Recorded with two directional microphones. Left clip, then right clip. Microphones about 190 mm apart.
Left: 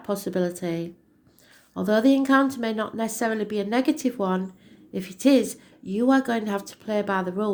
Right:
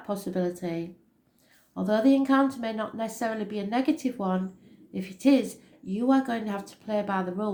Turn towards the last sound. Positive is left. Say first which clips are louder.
# left 4 dB
turn(degrees=45)  # may be behind; listen again after turning